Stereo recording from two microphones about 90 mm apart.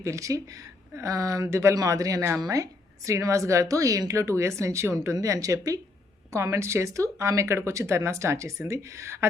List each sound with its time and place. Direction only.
0.0 s speech: 35° right (ahead or behind)